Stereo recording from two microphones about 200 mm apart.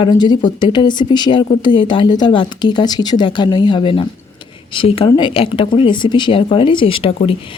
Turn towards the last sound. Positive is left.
turn(degrees=25)  # may be behind; listen again after turning